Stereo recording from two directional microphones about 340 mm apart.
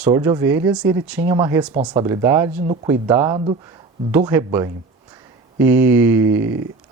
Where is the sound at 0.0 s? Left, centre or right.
Centre.